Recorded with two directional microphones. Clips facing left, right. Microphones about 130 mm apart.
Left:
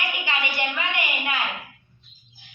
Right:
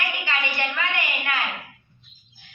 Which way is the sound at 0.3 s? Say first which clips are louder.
Left 1 dB; 15° left (ahead or behind).